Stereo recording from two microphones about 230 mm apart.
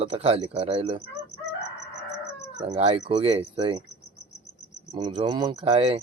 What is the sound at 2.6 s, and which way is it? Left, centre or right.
Speech, right.